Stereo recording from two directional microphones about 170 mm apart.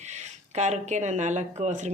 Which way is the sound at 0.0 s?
45° right (ahead or behind).